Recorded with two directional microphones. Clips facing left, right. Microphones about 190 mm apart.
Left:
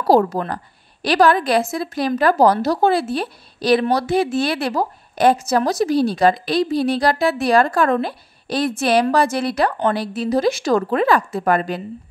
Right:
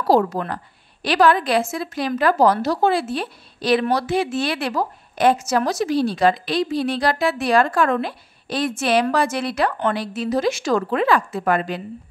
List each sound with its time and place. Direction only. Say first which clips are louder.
0.1 s a woman's voice: left 2 dB; 35° left (ahead or behind)